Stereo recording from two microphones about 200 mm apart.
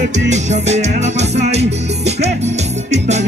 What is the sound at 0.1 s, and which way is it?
Music, 35° right (ahead or behind).